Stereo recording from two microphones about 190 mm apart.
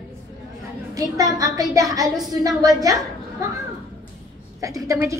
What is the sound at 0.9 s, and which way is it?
A woman's voice, 20° right (ahead or behind).